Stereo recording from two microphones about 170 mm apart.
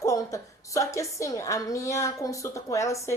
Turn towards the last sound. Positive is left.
turn(degrees=20)  # may be behind; listen again after turning